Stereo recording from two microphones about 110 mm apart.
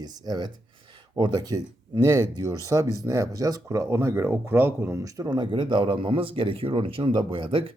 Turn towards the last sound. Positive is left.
turn(degrees=-50)  # may be behind; listen again after turning